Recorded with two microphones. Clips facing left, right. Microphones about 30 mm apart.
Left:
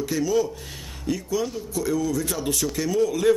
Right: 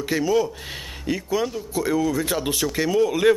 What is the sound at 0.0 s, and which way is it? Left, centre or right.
Speech, right.